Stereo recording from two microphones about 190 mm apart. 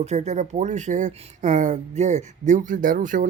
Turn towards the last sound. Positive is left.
turn(degrees=-45)  # may be behind; listen again after turning